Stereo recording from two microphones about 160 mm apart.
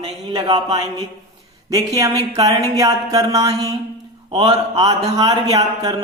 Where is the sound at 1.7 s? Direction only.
20° right (ahead or behind).